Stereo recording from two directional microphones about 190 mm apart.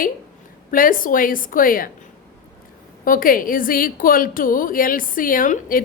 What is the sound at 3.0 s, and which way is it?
A woman's voice, 50° left (ahead or behind).